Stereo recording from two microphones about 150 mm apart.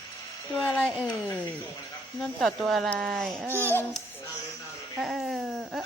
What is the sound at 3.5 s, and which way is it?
Speech, 15° left (ahead or behind).